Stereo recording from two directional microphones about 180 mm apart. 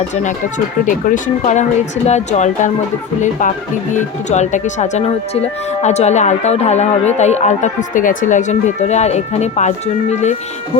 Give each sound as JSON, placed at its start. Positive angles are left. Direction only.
{"t": 0.1, "sound": "speech", "side_deg": 40}
{"t": 3.9, "sound": "speech", "side_deg": 40}